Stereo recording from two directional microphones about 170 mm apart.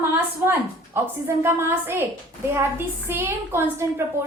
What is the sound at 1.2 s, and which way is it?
A woman's voice, 15° right (ahead or behind).